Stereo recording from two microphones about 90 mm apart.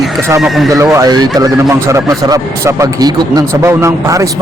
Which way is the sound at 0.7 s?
35° right (ahead or behind).